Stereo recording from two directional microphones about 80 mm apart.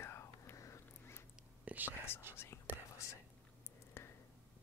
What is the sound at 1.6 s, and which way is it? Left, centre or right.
Whispering, right.